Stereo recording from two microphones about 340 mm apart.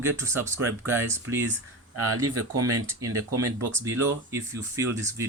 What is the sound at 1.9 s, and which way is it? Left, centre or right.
Speech, right.